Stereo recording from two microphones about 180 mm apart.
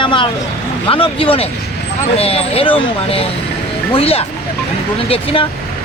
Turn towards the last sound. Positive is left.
turn(degrees=30)  # may be behind; listen again after turning